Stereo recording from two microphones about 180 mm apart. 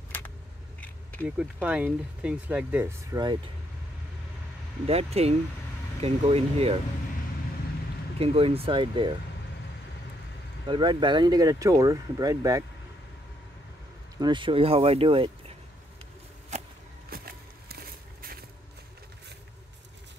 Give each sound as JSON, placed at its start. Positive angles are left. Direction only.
{"t": 0.1, "sound": "scissors", "side_deg": 10}
{"t": 1.2, "sound": "speech", "side_deg": -5}
{"t": 4.8, "sound": "speech", "side_deg": -35}
{"t": 8.2, "sound": "speech", "side_deg": -30}
{"t": 10.7, "sound": "speech", "side_deg": -25}
{"t": 14.1, "sound": "speech", "side_deg": -25}
{"t": 17.1, "sound": "a sound", "side_deg": -60}